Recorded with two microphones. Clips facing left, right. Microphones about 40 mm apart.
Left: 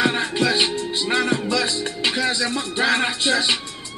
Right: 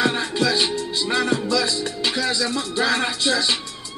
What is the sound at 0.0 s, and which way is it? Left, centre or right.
Music, left.